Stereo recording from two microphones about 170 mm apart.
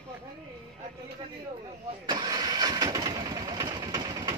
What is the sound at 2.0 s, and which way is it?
Engine starting, 25° right (ahead or behind).